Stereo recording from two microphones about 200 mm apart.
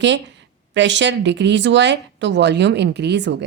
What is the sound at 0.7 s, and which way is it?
Speech, 65° right (ahead or behind).